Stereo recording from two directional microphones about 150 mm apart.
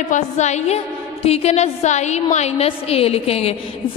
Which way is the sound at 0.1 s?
50° left (ahead or behind).